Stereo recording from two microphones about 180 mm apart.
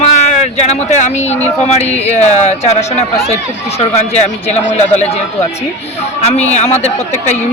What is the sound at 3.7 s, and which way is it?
Speech, 35° left (ahead or behind).